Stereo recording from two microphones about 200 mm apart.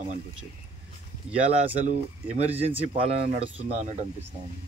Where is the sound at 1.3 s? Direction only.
30° right (ahead or behind).